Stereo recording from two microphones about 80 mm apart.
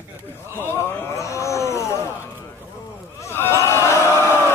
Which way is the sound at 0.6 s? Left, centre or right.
Left.